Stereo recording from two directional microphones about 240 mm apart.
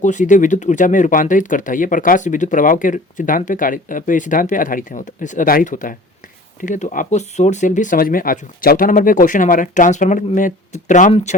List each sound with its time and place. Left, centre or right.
0.0 s speech: left